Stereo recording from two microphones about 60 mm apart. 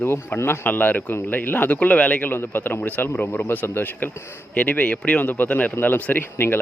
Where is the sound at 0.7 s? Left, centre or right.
Left.